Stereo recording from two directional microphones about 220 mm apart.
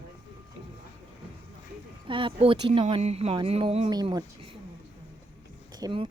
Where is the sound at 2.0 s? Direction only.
20° right (ahead or behind).